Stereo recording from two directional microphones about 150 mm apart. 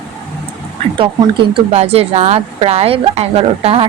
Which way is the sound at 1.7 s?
45° right (ahead or behind).